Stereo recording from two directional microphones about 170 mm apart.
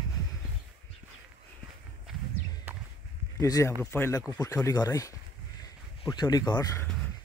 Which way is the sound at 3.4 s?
20° left (ahead or behind).